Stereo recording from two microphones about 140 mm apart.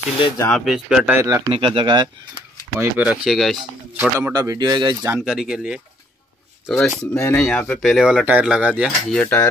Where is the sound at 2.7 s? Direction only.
10° right (ahead or behind).